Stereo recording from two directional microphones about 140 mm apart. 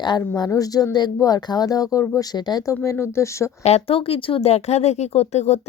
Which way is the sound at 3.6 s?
45° left (ahead or behind).